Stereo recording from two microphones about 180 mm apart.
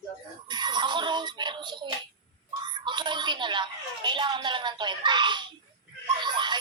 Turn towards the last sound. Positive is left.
turn(degrees=-25)  # may be behind; listen again after turning